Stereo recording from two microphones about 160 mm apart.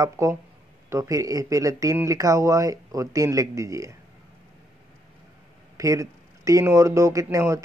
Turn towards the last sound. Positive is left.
turn(degrees=-20)  # may be behind; listen again after turning